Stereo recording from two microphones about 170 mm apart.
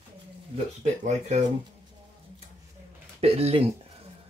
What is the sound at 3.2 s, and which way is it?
Speech, 35° right (ahead or behind).